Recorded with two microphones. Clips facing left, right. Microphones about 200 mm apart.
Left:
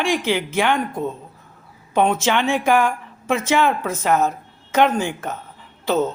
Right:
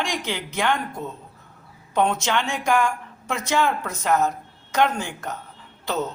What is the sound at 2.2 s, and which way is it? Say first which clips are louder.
Speech: left 5 dB; 15° left (ahead or behind).